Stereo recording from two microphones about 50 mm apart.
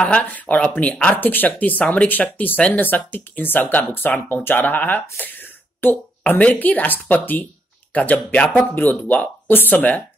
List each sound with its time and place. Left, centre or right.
0.2 s speech: left
5.1 s a sound: left
6.2 s speech: left
8.7 s speech: left